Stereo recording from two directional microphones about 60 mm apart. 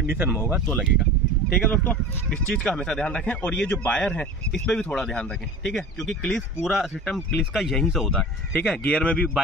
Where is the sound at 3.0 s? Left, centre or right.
Left.